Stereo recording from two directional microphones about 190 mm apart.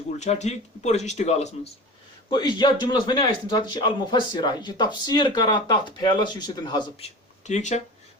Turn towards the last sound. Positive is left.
turn(degrees=40)  # may be behind; listen again after turning